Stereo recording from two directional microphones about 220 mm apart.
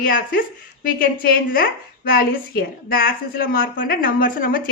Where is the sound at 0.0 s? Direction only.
40° left (ahead or behind).